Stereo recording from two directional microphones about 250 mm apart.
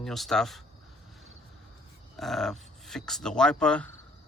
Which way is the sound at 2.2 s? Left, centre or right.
Centre.